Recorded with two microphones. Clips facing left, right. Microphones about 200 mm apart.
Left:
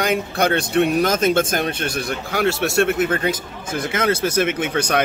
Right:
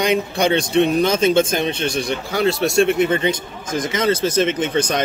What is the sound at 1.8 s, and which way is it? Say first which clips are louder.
A man's voice: right 3 dB; 5° left (ahead or behind).